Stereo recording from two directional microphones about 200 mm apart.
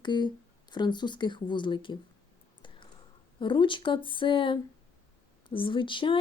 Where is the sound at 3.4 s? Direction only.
25° left (ahead or behind).